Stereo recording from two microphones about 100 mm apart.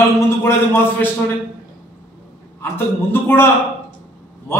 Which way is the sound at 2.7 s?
20° left (ahead or behind).